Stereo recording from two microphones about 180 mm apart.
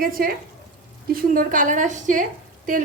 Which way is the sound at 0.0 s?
50° right (ahead or behind).